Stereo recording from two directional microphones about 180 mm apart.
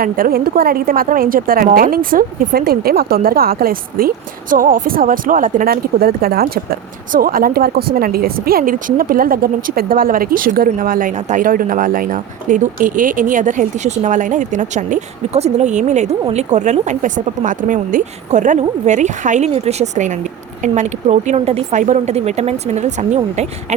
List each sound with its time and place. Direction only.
0.0 s a woman's voice: 55° right (ahead or behind)